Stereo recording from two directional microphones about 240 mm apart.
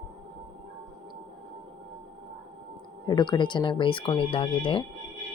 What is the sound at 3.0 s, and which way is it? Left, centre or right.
Speech, centre.